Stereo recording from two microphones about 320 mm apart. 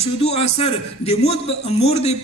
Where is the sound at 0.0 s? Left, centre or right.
Centre.